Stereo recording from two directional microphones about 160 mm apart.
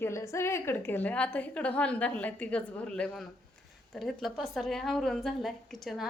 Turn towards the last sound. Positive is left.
turn(degrees=0)  # may be behind; listen again after turning